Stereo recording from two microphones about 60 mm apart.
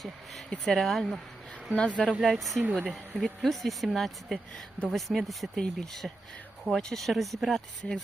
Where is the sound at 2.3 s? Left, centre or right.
Centre.